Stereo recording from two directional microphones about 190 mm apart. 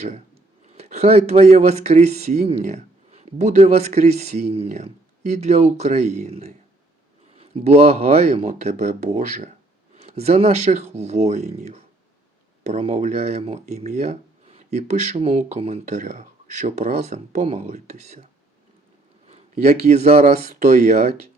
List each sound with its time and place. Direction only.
0.8 s speech: 35° right (ahead or behind)
19.3 s speech: 35° right (ahead or behind)